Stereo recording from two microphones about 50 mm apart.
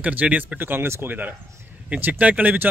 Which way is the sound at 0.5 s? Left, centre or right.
Right.